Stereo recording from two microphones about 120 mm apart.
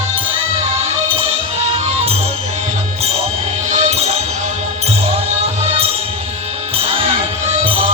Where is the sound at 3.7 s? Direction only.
70° right (ahead or behind).